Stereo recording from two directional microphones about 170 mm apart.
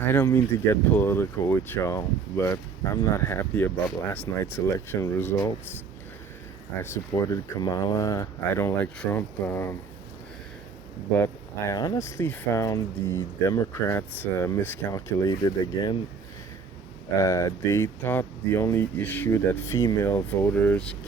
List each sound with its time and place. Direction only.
0.0 s speech: 15° left (ahead or behind)
6.8 s speech: 15° left (ahead or behind)
11.2 s speech: 20° left (ahead or behind)
17.2 s speech: 20° left (ahead or behind)